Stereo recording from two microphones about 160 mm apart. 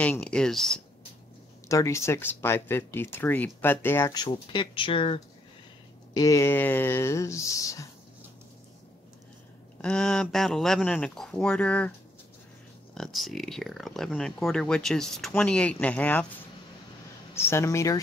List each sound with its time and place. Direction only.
0.0 s speech: 10° left (ahead or behind)
1.7 s speech: 20° left (ahead or behind); by 5.2 s 35° left (ahead or behind)
6.1 s speech: 20° left (ahead or behind)
9.8 s speech: 5° left (ahead or behind)
12.9 s speech: centre (ahead or behind)
17.3 s speech: 15° left (ahead or behind)